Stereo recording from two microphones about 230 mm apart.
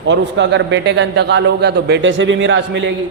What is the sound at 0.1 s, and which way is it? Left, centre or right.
A man's voice, right.